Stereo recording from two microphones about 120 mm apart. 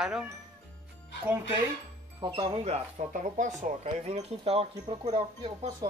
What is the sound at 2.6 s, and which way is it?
Speech, 75° right (ahead or behind).